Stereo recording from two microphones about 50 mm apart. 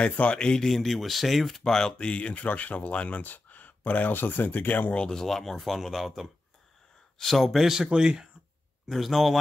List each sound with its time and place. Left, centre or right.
0.0 s speech: left
0.6 s speech: centre
1.6 s speech: centre; by 4.9 s left
4.9 s speech: centre
5.2 s speech: centre
7.6 s speech: centre
8.8 s speech: centre